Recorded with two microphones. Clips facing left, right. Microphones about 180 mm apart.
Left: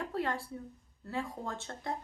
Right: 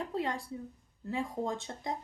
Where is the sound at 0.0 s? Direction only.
15° right (ahead or behind).